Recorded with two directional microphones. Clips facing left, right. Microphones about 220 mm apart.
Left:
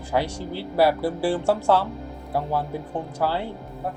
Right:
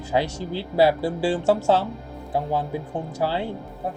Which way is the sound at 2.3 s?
15° right (ahead or behind).